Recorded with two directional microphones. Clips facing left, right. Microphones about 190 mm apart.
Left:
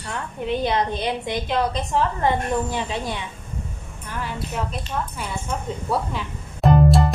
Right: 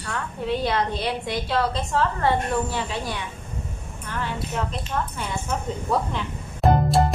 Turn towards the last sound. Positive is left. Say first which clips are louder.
# left 2 dB
turn(degrees=0)  # may be behind; listen again after turning